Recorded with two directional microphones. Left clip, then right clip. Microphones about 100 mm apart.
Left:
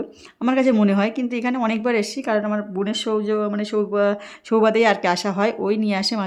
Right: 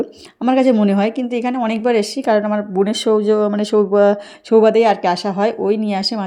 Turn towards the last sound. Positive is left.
turn(degrees=-15)  # may be behind; listen again after turning